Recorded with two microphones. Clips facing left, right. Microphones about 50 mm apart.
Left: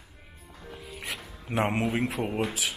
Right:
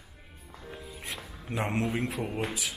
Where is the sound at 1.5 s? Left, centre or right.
Left.